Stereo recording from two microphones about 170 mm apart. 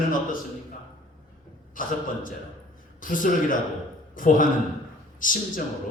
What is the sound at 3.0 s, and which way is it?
A man's voice, 50° left (ahead or behind).